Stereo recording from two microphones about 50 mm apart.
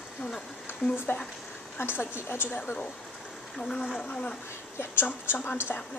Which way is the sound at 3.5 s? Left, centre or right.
Centre.